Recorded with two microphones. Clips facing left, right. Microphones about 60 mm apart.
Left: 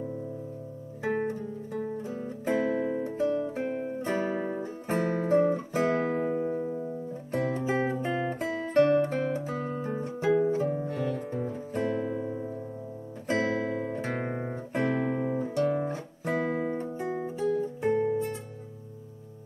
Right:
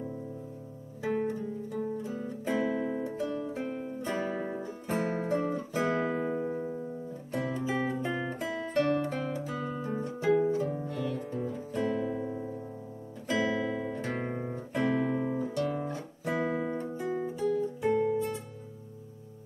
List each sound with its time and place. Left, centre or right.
1.0 s music: left
6.2 s music: centre
7.3 s music: left
8.8 s guitar: left
10.5 s music: left
13.3 s guitar: left
16.9 s music: left